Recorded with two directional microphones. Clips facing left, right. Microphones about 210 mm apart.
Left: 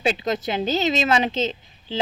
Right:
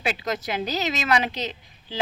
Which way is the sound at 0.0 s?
25° left (ahead or behind).